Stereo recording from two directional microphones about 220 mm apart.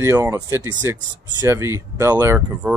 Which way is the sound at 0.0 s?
10° right (ahead or behind).